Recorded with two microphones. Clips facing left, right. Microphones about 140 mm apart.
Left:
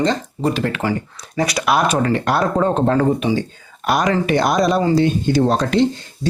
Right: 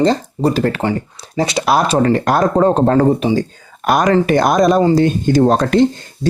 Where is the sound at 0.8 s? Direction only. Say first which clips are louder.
Right 3 dB; 30° right (ahead or behind).